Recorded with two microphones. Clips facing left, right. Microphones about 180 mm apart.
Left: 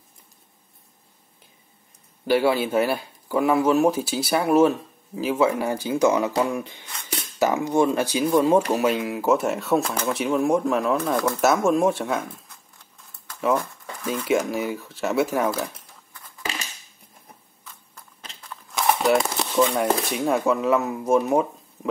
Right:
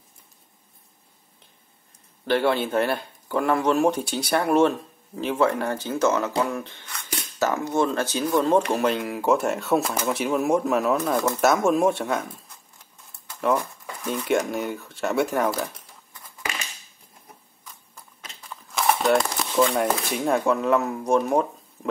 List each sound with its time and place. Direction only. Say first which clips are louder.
2.2 s speech: left 2 dB; 10° left (ahead or behind)
14.0 s speech: left 1 dB; centre (ahead or behind)
16.1 s a sound: left 1 dB; 20° right (ahead or behind)
18.4 s speech: even; 5° right (ahead or behind)